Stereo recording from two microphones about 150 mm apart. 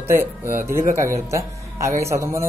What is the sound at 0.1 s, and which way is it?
Speech, 15° right (ahead or behind).